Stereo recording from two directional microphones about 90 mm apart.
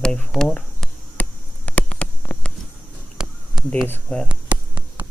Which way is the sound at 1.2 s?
15° left (ahead or behind).